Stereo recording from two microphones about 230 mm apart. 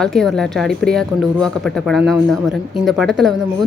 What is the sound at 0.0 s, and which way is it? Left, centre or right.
A woman's voice, centre.